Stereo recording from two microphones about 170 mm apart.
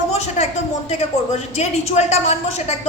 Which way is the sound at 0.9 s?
40° left (ahead or behind).